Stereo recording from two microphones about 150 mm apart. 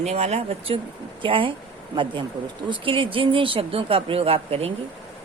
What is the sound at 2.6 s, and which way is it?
A woman's voice, 35° right (ahead or behind).